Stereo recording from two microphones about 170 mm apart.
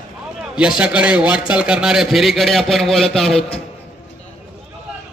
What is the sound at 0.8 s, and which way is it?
A man's voice, 5° right (ahead or behind).